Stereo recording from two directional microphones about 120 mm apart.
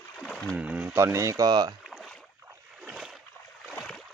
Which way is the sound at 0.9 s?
25° right (ahead or behind).